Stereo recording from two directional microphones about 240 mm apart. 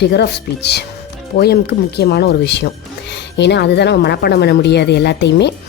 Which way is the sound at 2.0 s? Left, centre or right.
Left.